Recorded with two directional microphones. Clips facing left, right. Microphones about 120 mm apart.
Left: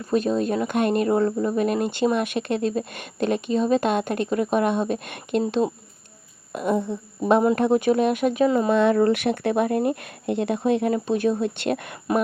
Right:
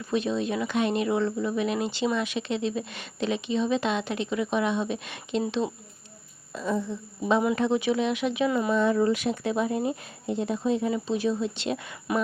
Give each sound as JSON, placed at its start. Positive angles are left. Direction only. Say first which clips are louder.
{"t": 0.1, "sound": "speech", "louder": "left 5 dB", "side_deg": 45}
{"t": 5.5, "sound": "speech", "louder": "left 5 dB", "side_deg": 45}
{"t": 6.5, "sound": "speech", "louder": "left 5 dB", "side_deg": 60}
{"t": 8.7, "sound": "speech", "louder": "left 5 dB", "side_deg": 70}